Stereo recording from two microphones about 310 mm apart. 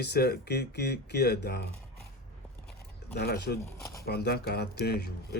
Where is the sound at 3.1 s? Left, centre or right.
Left.